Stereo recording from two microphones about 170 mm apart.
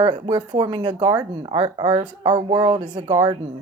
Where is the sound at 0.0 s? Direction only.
25° right (ahead or behind).